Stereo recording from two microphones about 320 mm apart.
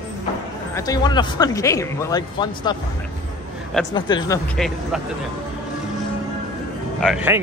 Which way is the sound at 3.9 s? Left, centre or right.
Centre.